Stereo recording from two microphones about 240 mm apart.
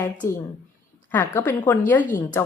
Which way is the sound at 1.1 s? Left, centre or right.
Centre.